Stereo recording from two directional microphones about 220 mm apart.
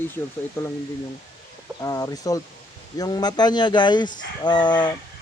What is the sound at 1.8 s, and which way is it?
Speech, 15° left (ahead or behind).